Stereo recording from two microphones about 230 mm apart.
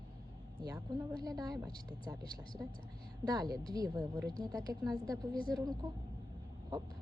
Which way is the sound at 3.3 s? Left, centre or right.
Centre.